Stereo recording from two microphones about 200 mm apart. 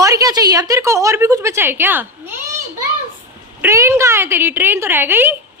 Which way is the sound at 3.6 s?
15° right (ahead or behind).